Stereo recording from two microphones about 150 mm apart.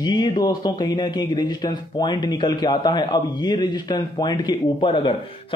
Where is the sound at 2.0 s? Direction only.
30° left (ahead or behind).